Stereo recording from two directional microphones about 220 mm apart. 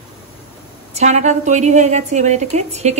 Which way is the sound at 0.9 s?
30° right (ahead or behind).